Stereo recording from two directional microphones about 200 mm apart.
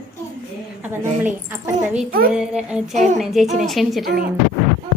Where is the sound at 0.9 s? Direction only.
10° right (ahead or behind).